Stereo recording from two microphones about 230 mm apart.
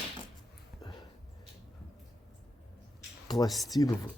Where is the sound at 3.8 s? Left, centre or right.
Centre.